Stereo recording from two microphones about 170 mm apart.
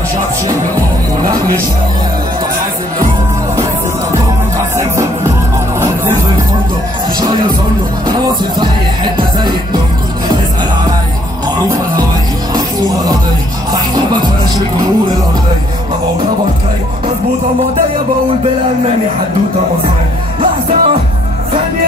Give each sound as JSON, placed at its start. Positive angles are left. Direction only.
{"t": 4.7, "sound": "music", "side_deg": -15}
{"t": 8.1, "sound": "music", "side_deg": -25}
{"t": 12.5, "sound": "music", "side_deg": -25}
{"t": 20.3, "sound": "music", "side_deg": -35}